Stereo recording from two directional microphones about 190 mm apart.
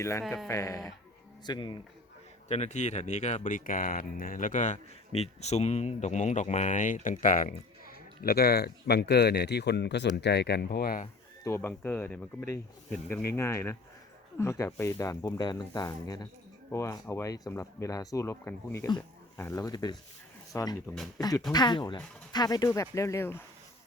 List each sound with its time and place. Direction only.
0.0 s speech: 15° left (ahead or behind)
2.5 s speech: 35° left (ahead or behind)
11.4 s speech: 10° left (ahead or behind)